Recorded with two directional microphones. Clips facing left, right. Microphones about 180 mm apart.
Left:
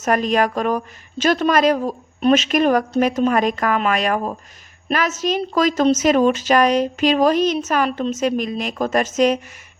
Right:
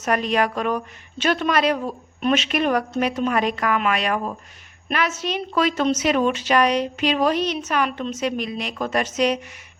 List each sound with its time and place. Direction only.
0.0 s a woman's voice: 45° left (ahead or behind)